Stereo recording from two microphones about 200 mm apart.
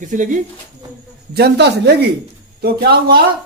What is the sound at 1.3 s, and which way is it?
Speech, 55° right (ahead or behind).